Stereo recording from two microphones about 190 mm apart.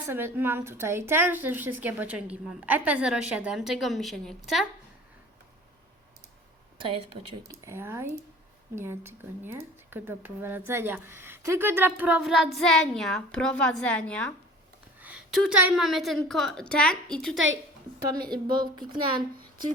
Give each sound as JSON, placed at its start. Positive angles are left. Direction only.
{"t": 0.1, "sound": "speech", "side_deg": -10}
{"t": 6.7, "sound": "a woman's voice", "side_deg": -25}
{"t": 7.6, "sound": "speech", "side_deg": -15}
{"t": 15.0, "sound": "a woman's voice", "side_deg": -5}
{"t": 17.3, "sound": "a woman's voice", "side_deg": -90}
{"t": 18.1, "sound": "a woman's voice", "side_deg": -25}